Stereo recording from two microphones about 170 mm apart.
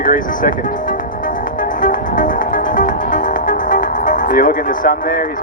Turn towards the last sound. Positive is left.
turn(degrees=55)  # may be behind; listen again after turning